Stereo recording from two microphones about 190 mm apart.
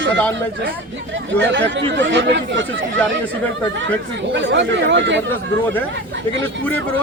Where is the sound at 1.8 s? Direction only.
70° right (ahead or behind).